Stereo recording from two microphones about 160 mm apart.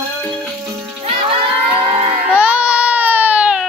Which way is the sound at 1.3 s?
35° right (ahead or behind).